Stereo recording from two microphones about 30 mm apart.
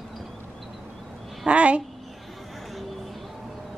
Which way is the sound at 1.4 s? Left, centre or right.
Right.